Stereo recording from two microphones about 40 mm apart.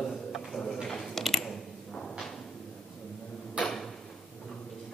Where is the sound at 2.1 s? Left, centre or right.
Centre.